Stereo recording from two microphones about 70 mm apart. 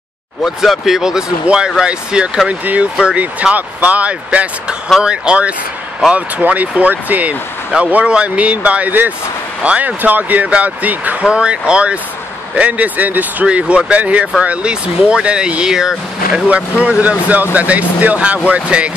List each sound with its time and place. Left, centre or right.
0.6 s speech: centre
16.4 s speech: centre